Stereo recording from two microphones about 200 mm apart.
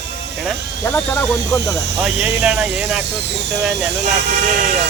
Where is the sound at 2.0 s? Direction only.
5° right (ahead or behind).